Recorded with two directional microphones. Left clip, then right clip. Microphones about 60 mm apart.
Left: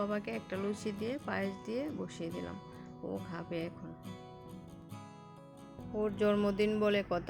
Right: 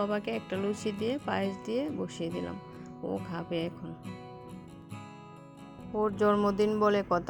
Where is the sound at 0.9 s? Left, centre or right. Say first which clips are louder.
Right 6 dB; right.